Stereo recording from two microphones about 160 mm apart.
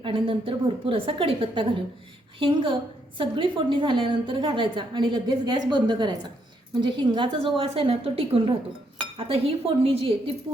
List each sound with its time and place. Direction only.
0.0 s a woman's voice: 35° right (ahead or behind)